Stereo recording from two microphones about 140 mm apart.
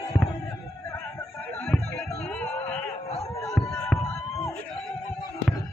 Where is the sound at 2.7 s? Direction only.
Centre (ahead or behind).